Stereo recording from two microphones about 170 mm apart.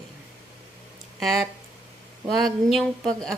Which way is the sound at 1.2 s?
Centre (ahead or behind).